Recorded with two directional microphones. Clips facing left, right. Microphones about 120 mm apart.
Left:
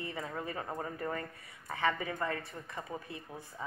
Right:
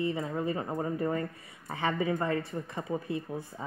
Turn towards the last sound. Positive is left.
turn(degrees=-25)  # may be behind; listen again after turning